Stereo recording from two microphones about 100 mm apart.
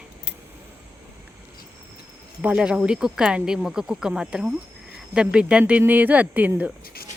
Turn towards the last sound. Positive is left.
turn(degrees=-15)  # may be behind; listen again after turning